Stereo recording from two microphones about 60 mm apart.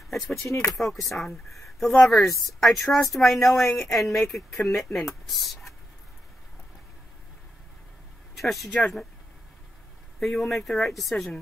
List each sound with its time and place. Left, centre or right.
0.1 s speech: centre
0.4 s speech: left
0.7 s speech: centre
8.4 s speech: centre
10.2 s speech: centre